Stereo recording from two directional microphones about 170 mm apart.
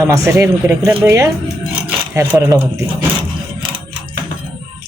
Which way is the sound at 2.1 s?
15° right (ahead or behind).